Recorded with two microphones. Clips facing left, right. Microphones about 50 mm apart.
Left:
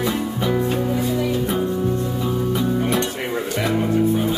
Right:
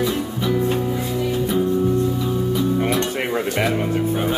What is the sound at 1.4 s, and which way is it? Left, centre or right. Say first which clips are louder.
Music: right 2 dB; left.